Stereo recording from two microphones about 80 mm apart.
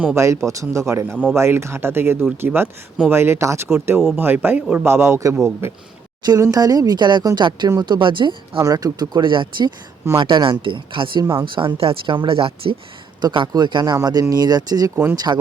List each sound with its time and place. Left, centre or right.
0.2 s speech: right
6.4 s speech: right
7.9 s speech: right
8.6 s speech: right
12.6 s a man's voice: right
13.5 s speech: right